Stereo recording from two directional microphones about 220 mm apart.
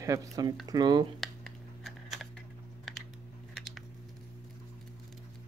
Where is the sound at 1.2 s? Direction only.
Centre (ahead or behind).